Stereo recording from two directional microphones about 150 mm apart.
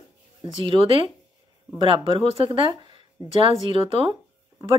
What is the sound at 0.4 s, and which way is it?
Speech, 35° right (ahead or behind).